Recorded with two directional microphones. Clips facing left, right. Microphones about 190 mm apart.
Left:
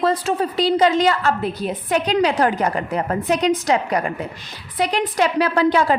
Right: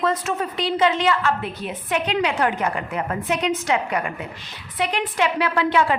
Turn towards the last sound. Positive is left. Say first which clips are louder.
# left 3 dB
turn(degrees=40)  # may be behind; listen again after turning